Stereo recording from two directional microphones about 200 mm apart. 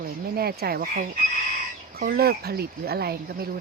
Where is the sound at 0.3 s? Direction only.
50° right (ahead or behind).